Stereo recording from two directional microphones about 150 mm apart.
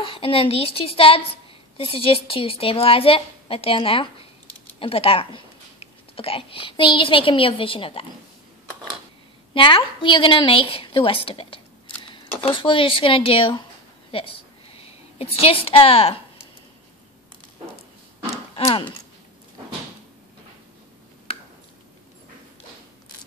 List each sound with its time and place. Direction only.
0.0 s a woman's voice: 35° left (ahead or behind)
9.5 s a woman's voice: 35° left (ahead or behind)
14.1 s a sound: 35° left (ahead or behind)
18.6 s a woman's voice: 35° left (ahead or behind)